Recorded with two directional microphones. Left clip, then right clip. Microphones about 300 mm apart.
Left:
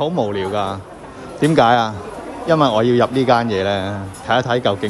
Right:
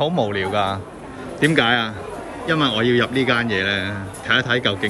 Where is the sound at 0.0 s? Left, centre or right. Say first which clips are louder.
Left 1 dB; centre.